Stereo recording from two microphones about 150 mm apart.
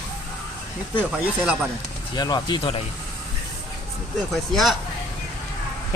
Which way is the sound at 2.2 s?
30° left (ahead or behind).